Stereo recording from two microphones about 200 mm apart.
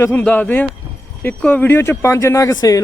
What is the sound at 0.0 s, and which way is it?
Speech, 10° left (ahead or behind).